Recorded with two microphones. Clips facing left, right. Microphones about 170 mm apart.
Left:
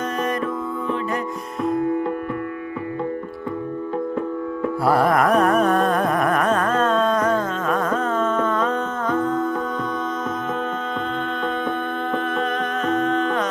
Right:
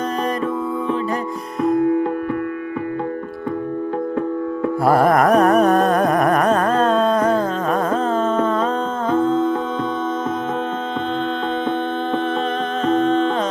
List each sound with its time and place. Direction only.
4.8 s carnatic music: 45° right (ahead or behind); by 9.6 s 25° right (ahead or behind)
12.8 s music: 30° right (ahead or behind)